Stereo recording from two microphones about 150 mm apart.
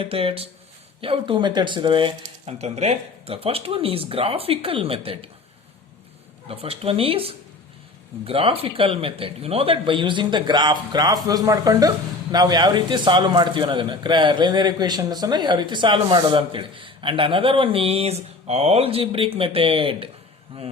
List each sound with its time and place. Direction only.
0.0 s a man's voice: 40° right (ahead or behind)
6.5 s a man's voice: 40° right (ahead or behind)